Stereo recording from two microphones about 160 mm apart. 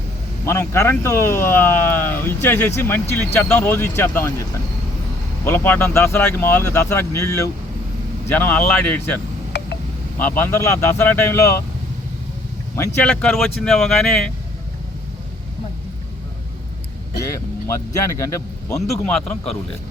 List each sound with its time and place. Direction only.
0.6 s speech: 15° left (ahead or behind)
5.5 s speech: 10° left (ahead or behind)
12.7 s speech: 15° left (ahead or behind)
17.3 s speech: 15° left (ahead or behind)
18.7 s speech: 5° left (ahead or behind)